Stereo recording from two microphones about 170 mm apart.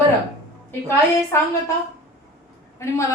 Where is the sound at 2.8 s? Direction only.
15° left (ahead or behind).